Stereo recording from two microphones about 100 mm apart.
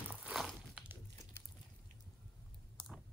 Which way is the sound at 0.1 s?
15° right (ahead or behind).